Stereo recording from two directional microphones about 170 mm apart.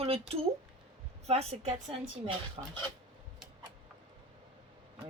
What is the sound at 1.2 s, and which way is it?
Speech, 40° right (ahead or behind).